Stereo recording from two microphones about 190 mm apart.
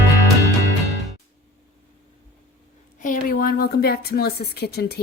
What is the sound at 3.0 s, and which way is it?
A woman's voice, 45° left (ahead or behind).